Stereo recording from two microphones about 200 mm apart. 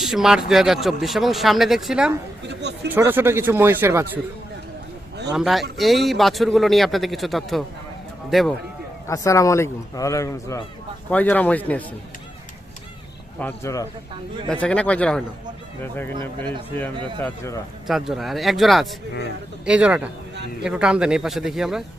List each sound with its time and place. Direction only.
0.0 s speech: centre (ahead or behind)
2.5 s speech: 60° right (ahead or behind)
2.9 s speech: 10° right (ahead or behind)
5.3 s speech: centre (ahead or behind)
9.0 s speech: 15° left (ahead or behind)
13.4 s speech: 10° left (ahead or behind)
17.2 s speech: 10° left (ahead or behind)
17.8 s speech: centre (ahead or behind)